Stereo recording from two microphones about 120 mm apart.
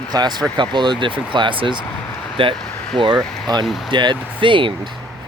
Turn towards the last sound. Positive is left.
turn(degrees=-45)  # may be behind; listen again after turning